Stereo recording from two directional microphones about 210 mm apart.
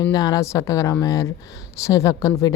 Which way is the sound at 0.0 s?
20° left (ahead or behind).